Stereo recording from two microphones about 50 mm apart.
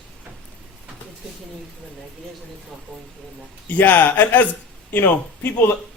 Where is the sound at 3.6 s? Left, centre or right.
Left.